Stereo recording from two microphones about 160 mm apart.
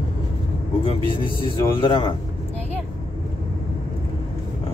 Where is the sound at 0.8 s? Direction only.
35° left (ahead or behind).